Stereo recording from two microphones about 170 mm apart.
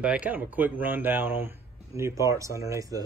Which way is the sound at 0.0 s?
10° right (ahead or behind).